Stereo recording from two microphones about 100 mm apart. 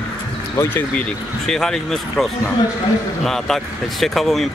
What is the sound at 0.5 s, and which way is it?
Speech, 20° left (ahead or behind).